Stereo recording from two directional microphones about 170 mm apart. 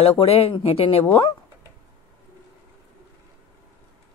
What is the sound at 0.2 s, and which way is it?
Speech, 35° left (ahead or behind).